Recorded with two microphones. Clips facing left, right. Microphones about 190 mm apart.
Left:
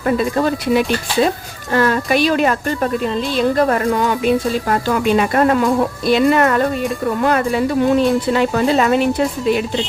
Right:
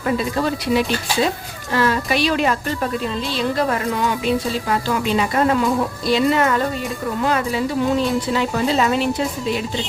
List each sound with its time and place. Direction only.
0.2 s a woman's voice: 50° left (ahead or behind)